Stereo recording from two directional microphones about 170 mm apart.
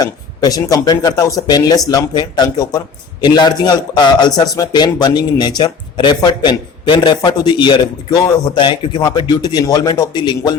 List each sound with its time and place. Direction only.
0.0 s a man's voice: 20° left (ahead or behind)